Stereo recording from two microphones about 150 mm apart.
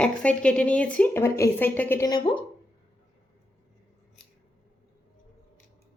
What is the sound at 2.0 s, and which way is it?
Speech, 30° left (ahead or behind).